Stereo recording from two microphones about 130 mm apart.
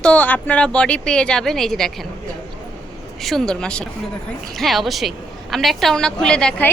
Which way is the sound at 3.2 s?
Centre (ahead or behind).